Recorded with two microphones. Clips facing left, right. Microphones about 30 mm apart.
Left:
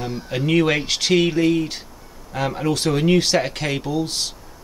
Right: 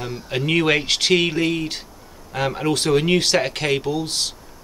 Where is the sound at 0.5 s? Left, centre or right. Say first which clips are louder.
Even; centre.